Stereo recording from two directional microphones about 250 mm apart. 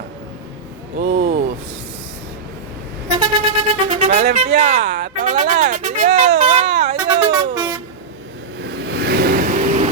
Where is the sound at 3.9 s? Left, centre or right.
Right.